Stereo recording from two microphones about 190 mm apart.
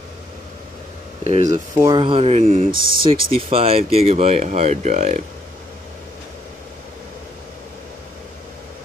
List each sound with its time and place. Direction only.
1.2 s speech: 35° right (ahead or behind)
1.8 s speech: 25° right (ahead or behind)